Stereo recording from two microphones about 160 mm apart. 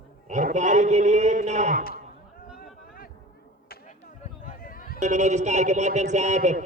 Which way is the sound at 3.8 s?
50° left (ahead or behind).